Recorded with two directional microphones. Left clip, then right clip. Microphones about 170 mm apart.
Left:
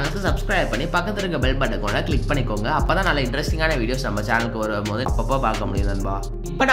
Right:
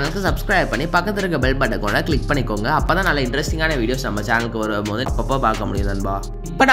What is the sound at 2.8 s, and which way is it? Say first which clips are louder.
Speech: right 2 dB; 20° right (ahead or behind).